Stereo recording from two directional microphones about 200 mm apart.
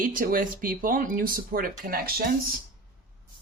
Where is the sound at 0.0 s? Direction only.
45° right (ahead or behind).